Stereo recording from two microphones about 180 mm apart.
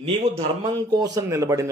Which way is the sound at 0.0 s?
30° right (ahead or behind).